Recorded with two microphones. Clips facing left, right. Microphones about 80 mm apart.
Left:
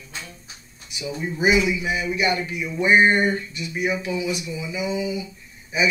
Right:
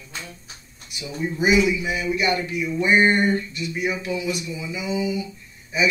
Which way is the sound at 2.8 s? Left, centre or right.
Centre.